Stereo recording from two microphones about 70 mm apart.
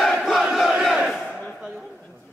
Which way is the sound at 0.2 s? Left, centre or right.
Centre.